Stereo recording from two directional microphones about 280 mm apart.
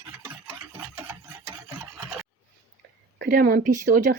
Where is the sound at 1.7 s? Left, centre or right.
Centre.